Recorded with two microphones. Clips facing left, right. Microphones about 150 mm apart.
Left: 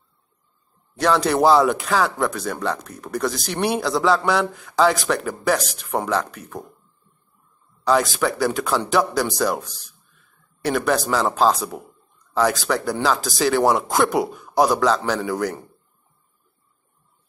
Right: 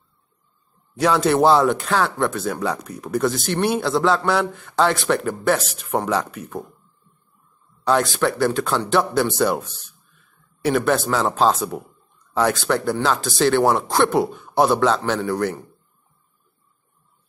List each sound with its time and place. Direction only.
0.9 s speech: 5° right (ahead or behind)
7.8 s speech: centre (ahead or behind)
9.7 s speech: 35° left (ahead or behind)
10.6 s speech: centre (ahead or behind)